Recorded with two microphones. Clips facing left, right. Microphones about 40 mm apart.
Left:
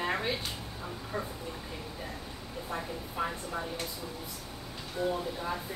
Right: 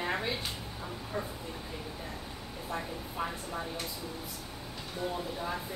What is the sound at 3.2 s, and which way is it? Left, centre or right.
Speech, centre.